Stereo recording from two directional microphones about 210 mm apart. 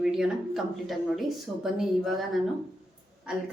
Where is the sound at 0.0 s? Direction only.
5° right (ahead or behind).